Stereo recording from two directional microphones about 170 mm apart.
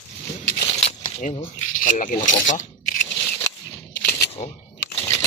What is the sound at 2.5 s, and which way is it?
Scrape, 45° left (ahead or behind).